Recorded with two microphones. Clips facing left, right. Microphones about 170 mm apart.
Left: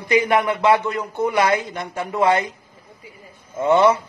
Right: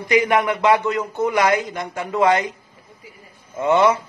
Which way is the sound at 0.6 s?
15° right (ahead or behind).